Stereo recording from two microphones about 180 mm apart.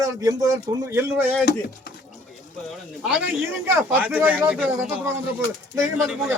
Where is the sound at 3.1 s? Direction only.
10° right (ahead or behind).